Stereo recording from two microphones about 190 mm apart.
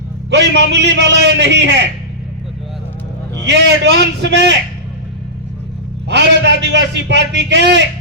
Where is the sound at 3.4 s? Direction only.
65° right (ahead or behind).